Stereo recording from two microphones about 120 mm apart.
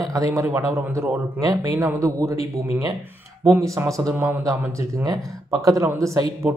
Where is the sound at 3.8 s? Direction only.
25° right (ahead or behind).